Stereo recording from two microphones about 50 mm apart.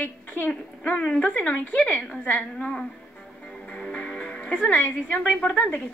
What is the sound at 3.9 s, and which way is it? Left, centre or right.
Music, left.